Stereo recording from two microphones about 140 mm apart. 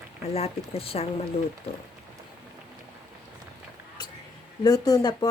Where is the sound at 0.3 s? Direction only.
45° left (ahead or behind).